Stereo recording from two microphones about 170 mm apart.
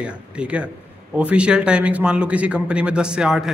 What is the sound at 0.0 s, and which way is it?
A man's voice, 5° right (ahead or behind).